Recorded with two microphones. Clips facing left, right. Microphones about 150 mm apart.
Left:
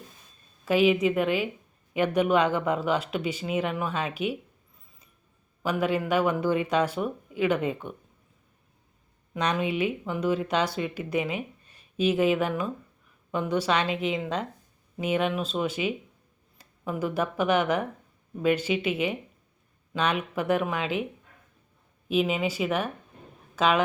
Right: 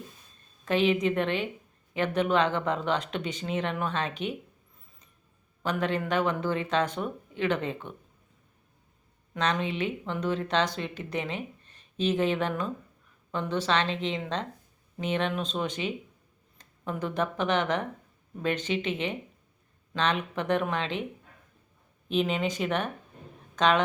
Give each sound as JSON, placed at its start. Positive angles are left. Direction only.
{"t": 0.6, "sound": "speech", "side_deg": 10}
{"t": 5.6, "sound": "speech", "side_deg": 10}
{"t": 9.3, "sound": "speech", "side_deg": 10}
{"t": 22.1, "sound": "speech", "side_deg": 5}